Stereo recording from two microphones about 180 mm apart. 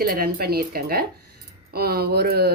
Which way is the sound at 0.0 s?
55° right (ahead or behind).